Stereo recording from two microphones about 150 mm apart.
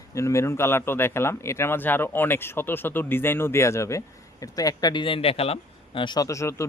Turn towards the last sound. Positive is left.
turn(degrees=20)  # may be behind; listen again after turning